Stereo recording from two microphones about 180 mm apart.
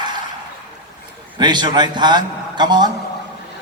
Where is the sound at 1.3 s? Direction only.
25° right (ahead or behind).